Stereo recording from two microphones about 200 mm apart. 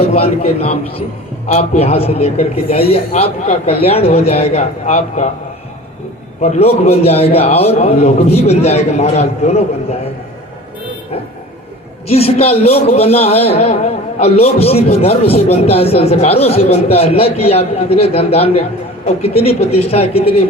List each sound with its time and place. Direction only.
0.0 s a man's voice: 30° left (ahead or behind)
6.4 s a man's voice: 30° left (ahead or behind)
12.0 s a man's voice: 30° left (ahead or behind)